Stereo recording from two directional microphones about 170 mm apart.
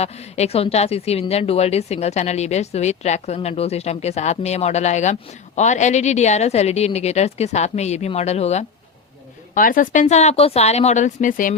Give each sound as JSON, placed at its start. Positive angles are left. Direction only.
{"t": 0.0, "sound": "a woman's voice", "side_deg": 40}
{"t": 9.6, "sound": "speech", "side_deg": 55}